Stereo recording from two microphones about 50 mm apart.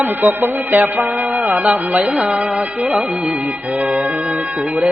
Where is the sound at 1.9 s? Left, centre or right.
Right.